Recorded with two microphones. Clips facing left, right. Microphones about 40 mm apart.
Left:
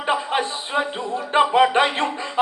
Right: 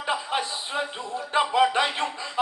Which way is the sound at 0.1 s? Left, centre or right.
Left.